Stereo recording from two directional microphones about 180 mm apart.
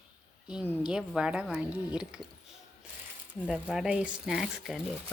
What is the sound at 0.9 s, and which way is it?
Speech, centre (ahead or behind).